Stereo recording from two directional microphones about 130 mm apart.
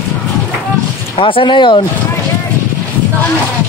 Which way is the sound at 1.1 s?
40° left (ahead or behind).